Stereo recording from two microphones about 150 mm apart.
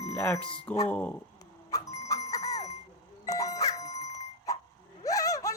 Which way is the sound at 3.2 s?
25° left (ahead or behind).